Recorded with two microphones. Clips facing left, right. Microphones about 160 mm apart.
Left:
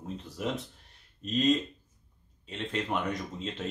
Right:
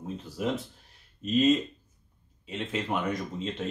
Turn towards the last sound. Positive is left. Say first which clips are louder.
# right 3 dB
turn(degrees=0)  # may be behind; listen again after turning